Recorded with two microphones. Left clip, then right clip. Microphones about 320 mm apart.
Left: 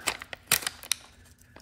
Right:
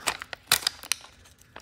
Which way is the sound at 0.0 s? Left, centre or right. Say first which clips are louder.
Right 2 dB; centre.